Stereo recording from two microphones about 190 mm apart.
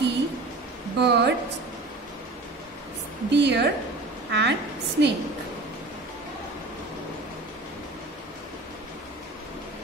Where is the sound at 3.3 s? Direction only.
65° right (ahead or behind).